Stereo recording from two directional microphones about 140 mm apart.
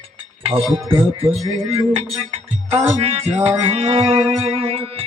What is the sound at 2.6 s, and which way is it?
Speech, 45° right (ahead or behind).